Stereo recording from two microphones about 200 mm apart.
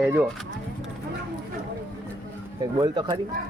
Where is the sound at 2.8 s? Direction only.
20° right (ahead or behind).